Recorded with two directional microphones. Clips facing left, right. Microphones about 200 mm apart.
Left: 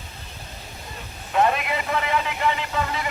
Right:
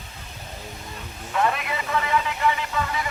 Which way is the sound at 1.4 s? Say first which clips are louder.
Left 3 dB; 25° left (ahead or behind).